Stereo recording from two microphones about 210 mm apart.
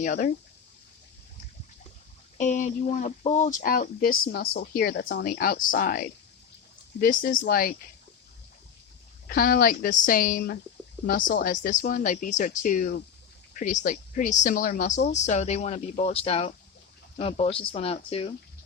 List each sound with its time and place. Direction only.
0.0 s speech: 35° left (ahead or behind)
2.4 s speech: 35° left (ahead or behind)
9.3 s speech: 45° left (ahead or behind); by 18.3 s 25° left (ahead or behind)